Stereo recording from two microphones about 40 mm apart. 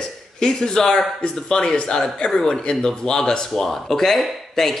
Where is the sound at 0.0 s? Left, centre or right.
Centre.